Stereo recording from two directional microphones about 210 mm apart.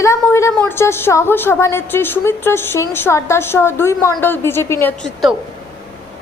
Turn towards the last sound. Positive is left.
turn(degrees=5)  # may be behind; listen again after turning